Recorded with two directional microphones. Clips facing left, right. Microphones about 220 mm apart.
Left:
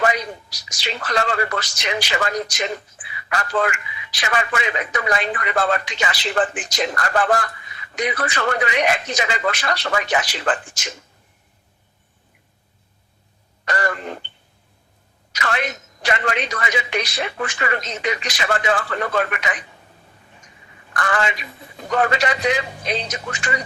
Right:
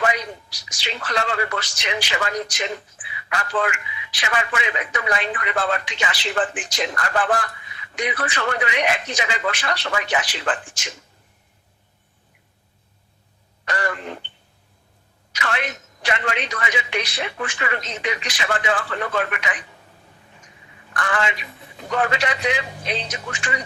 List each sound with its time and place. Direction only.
0.0 s a man's voice: 40° left (ahead or behind)
13.7 s a sound: 40° left (ahead or behind)
15.4 s a man's voice: 40° left (ahead or behind)
20.9 s a man's voice: 40° left (ahead or behind)